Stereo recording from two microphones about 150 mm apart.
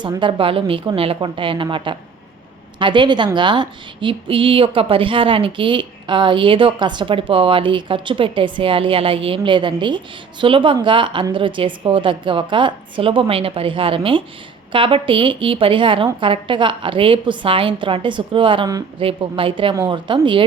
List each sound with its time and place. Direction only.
0.2 s speech: 35° right (ahead or behind)